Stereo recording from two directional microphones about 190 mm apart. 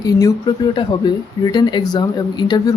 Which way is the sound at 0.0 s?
20° left (ahead or behind).